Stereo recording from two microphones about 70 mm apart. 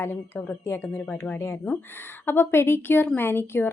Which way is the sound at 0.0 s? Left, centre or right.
Left.